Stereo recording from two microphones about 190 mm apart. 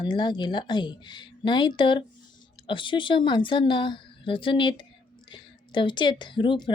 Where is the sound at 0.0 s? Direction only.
25° left (ahead or behind).